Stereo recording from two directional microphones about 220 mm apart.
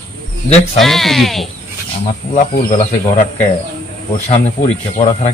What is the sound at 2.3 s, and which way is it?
Speech, 35° left (ahead or behind).